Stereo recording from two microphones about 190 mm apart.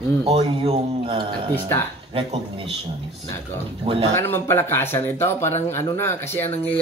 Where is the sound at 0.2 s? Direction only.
30° right (ahead or behind).